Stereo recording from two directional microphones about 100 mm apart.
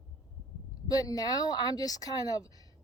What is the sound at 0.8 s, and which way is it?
Speech, 40° left (ahead or behind).